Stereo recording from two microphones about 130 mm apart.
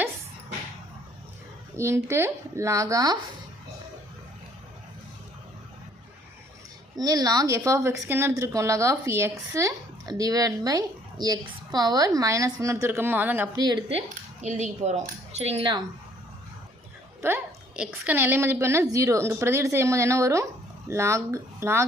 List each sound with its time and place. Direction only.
1.7 s a woman's voice: 20° right (ahead or behind)
6.9 s a woman's voice: 30° right (ahead or behind); by 13.5 s 15° right (ahead or behind)
14.4 s speech: 60° right (ahead or behind)
17.2 s a woman's voice: 15° right (ahead or behind)